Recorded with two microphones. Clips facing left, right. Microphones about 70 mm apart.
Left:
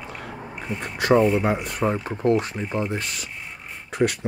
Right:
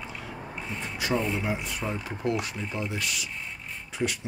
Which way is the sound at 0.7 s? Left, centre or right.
Left.